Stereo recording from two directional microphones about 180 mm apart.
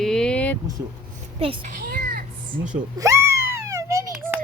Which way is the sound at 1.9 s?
50° right (ahead or behind).